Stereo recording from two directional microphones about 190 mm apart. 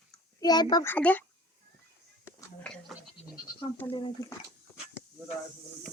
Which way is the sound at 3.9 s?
25° left (ahead or behind).